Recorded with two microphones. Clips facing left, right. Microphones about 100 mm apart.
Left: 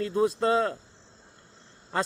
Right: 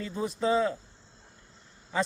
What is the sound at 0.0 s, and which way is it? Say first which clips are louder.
Speech: left 5 dB; 70° left (ahead or behind).